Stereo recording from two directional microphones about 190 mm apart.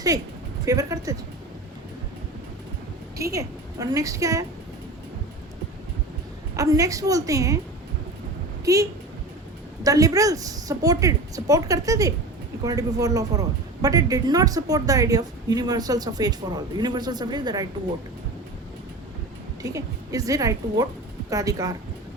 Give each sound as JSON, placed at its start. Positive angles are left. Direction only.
{"t": 0.6, "sound": "a woman's voice", "side_deg": -15}
{"t": 3.2, "sound": "a woman's voice", "side_deg": -15}
{"t": 6.6, "sound": "a woman's voice", "side_deg": -20}
{"t": 8.6, "sound": "a woman's voice", "side_deg": -15}
{"t": 19.6, "sound": "a woman's voice", "side_deg": -15}